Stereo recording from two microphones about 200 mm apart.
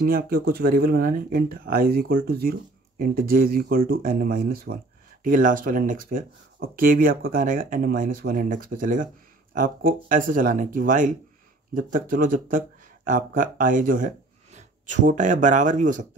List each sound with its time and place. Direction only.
0.0 s speech: 50° right (ahead or behind)